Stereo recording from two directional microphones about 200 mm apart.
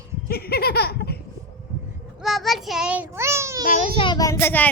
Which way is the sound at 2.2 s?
Centre (ahead or behind).